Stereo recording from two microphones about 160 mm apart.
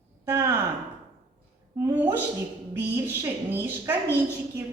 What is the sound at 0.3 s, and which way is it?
Speech, 15° right (ahead or behind).